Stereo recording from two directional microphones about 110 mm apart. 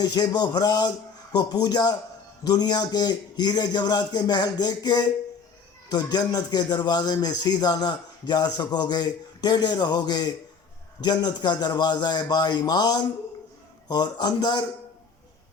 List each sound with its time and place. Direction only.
0.0 s speech: 35° left (ahead or behind)